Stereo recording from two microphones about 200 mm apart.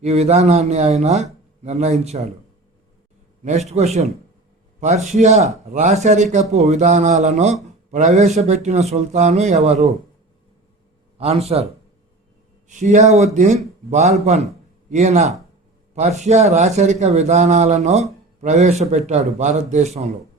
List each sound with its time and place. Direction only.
0.0 s speech: 35° right (ahead or behind)
3.4 s a man's voice: 35° right (ahead or behind)
11.2 s a man's voice: 30° right (ahead or behind)